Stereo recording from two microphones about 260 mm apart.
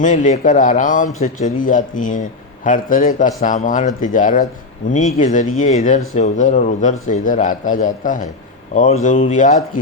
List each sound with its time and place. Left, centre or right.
0.0 s speech: left